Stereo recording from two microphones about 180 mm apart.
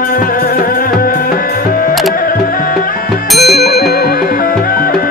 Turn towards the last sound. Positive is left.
turn(degrees=60)  # may be behind; listen again after turning